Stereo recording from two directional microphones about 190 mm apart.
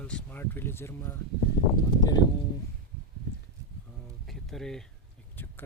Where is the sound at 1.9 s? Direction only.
20° left (ahead or behind).